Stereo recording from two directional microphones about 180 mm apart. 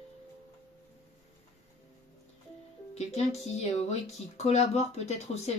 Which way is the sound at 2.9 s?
40° left (ahead or behind).